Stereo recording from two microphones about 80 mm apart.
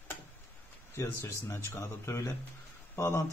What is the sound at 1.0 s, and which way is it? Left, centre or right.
A man's voice, left.